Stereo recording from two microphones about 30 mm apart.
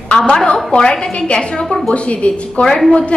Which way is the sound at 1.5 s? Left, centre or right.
Left.